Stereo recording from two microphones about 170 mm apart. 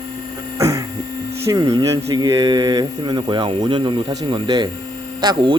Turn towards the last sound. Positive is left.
turn(degrees=-25)  # may be behind; listen again after turning